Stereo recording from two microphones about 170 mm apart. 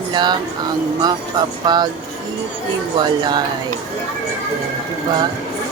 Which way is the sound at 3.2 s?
25° right (ahead or behind).